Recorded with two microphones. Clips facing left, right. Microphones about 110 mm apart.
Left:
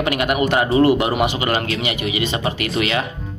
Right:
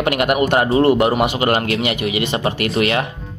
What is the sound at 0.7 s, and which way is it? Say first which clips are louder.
A man's voice: right 1 dB; 40° right (ahead or behind).